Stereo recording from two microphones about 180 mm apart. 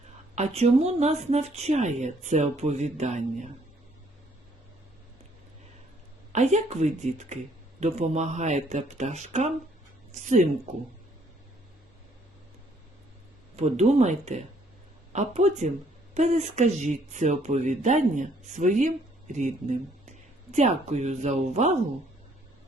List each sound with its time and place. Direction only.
0.3 s speech: 40° right (ahead or behind)
6.3 s speech: 40° right (ahead or behind)
13.6 s speech: 35° right (ahead or behind)